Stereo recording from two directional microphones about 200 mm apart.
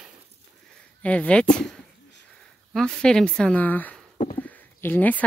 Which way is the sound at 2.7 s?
5° left (ahead or behind).